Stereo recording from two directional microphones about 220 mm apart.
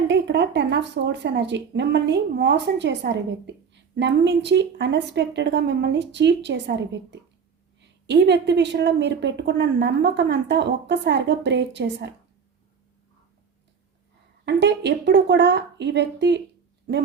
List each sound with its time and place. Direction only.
0.1 s a woman's voice: 50° right (ahead or behind)
14.4 s a woman's voice: 50° right (ahead or behind)